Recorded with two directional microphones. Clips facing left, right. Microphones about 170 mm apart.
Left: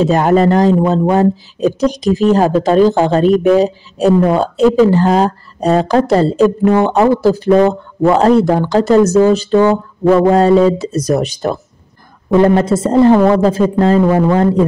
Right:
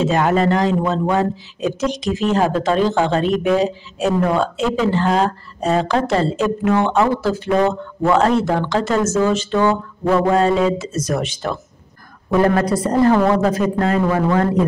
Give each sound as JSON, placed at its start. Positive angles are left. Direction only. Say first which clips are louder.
{"t": 0.0, "sound": "a man's voice", "louder": "left 5 dB", "side_deg": 40}
{"t": 12.3, "sound": "a woman's voice", "louder": "left 5 dB", "side_deg": 25}